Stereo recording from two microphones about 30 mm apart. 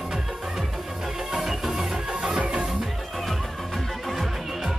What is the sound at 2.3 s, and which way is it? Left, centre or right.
Music, right.